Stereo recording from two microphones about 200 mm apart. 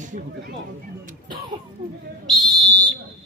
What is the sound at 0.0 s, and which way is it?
Speech, 40° right (ahead or behind).